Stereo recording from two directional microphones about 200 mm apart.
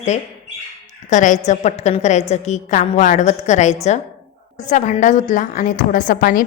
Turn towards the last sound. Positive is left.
turn(degrees=45)  # may be behind; listen again after turning